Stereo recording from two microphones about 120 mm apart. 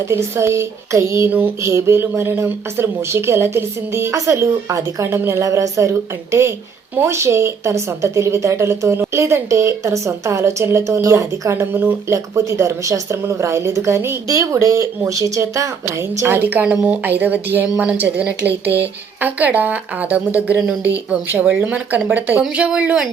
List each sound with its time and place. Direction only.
0.1 s a woman's voice: 20° right (ahead or behind)